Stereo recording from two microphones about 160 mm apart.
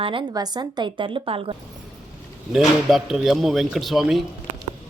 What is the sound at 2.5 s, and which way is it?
A man's voice, centre (ahead or behind).